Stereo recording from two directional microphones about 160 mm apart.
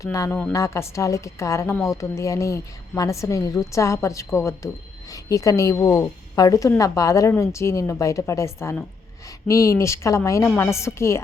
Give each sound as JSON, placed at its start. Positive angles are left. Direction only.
{"t": 0.0, "sound": "a woman's voice", "side_deg": 20}